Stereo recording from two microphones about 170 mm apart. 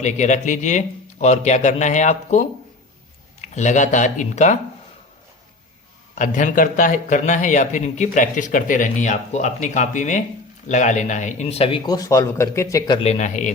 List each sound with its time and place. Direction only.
0.0 s speech: 45° left (ahead or behind)
3.4 s speech: 45° left (ahead or behind)
6.1 s speech: 50° left (ahead or behind)
11.9 s speech: 20° left (ahead or behind)
13.1 s speech: 45° left (ahead or behind)